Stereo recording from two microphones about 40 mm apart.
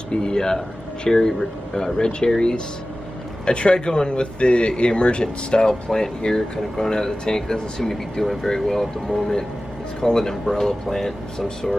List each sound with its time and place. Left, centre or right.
0.1 s speech: centre